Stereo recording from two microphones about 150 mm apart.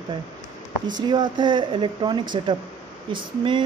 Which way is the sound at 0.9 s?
30° right (ahead or behind).